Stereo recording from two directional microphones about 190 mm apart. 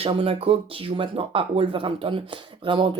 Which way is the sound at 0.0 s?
30° right (ahead or behind).